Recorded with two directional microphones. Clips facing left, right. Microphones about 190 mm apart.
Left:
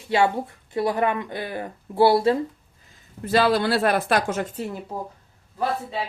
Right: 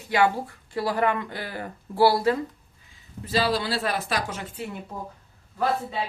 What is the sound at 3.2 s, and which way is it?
Speech, 55° left (ahead or behind).